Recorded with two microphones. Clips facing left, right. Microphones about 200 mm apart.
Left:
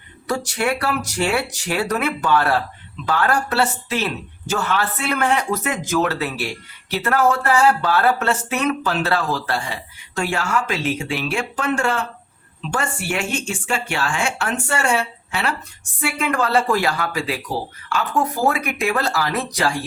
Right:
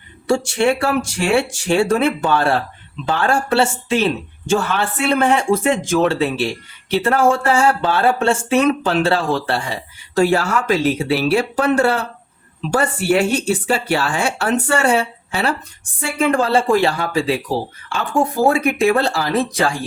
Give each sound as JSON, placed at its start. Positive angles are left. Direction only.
{"t": 0.3, "sound": "speech", "side_deg": -25}